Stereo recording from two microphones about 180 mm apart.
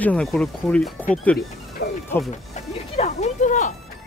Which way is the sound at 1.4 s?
60° left (ahead or behind).